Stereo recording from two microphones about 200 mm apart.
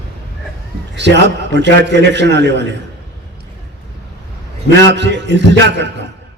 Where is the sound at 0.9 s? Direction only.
60° right (ahead or behind).